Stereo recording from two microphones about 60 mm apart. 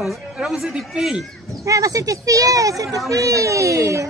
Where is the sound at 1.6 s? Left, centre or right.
Right.